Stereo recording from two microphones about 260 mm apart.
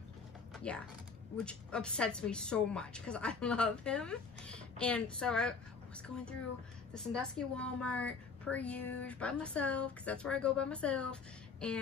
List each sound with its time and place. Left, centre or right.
0.7 s a woman's voice: centre